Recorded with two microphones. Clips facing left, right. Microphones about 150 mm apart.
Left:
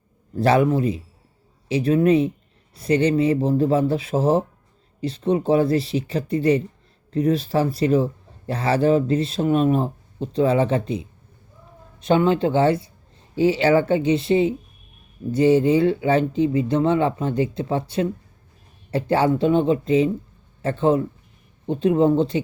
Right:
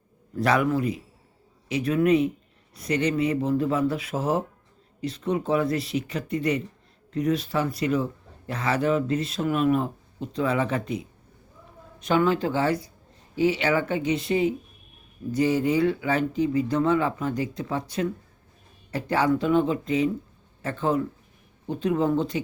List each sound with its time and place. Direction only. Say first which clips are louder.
0.3 s a man's voice: left 5 dB; 30° left (ahead or behind)